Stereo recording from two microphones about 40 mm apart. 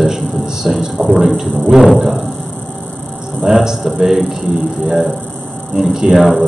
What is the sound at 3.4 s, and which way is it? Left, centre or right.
A man's voice, centre.